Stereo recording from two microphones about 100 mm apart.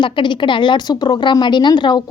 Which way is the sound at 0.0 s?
55° left (ahead or behind).